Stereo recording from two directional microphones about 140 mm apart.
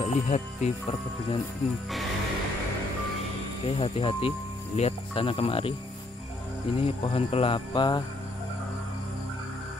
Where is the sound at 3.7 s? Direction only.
40° left (ahead or behind).